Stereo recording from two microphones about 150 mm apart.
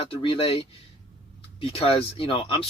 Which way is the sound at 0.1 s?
35° left (ahead or behind).